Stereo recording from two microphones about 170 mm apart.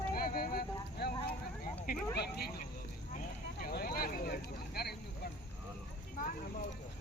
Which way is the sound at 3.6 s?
55° left (ahead or behind).